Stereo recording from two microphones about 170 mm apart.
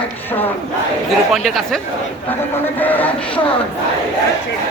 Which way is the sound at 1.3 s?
Centre (ahead or behind).